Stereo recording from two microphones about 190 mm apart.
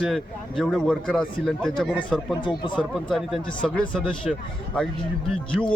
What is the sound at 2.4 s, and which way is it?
Speech, 25° left (ahead or behind).